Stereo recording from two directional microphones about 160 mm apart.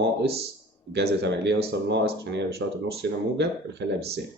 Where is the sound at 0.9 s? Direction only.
90° right.